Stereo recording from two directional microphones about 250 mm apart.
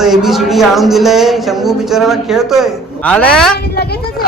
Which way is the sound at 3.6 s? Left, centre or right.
Left.